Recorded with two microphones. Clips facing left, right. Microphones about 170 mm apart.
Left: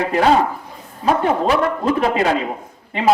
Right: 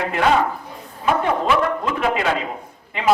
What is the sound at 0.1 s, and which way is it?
A man's voice, 35° left (ahead or behind).